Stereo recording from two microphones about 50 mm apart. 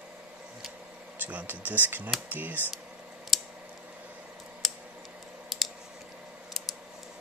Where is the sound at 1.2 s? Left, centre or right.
Right.